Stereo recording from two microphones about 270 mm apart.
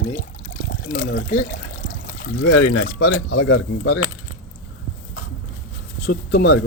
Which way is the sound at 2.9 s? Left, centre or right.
Left.